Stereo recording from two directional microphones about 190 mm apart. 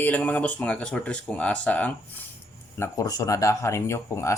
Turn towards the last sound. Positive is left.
turn(degrees=15)  # may be behind; listen again after turning